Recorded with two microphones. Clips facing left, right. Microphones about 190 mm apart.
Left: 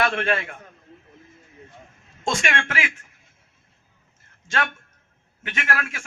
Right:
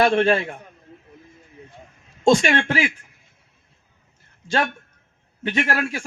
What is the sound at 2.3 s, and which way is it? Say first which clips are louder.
Speech: right 7 dB; 35° right (ahead or behind).